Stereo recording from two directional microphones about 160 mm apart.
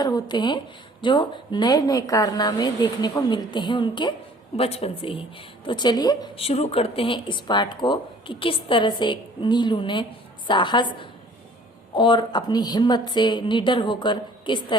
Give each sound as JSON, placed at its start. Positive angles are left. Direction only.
{"t": 0.0, "sound": "a woman's voice", "side_deg": 25}
{"t": 6.4, "sound": "a woman's voice", "side_deg": 40}